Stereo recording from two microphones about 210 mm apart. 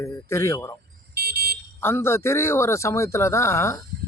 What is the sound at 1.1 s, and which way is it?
Car alarm, 50° right (ahead or behind).